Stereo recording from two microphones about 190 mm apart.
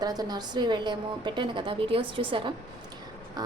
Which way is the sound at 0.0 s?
20° right (ahead or behind).